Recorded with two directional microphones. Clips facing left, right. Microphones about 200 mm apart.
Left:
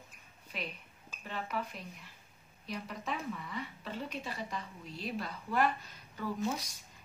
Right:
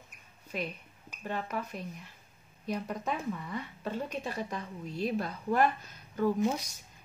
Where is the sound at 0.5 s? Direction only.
50° right (ahead or behind).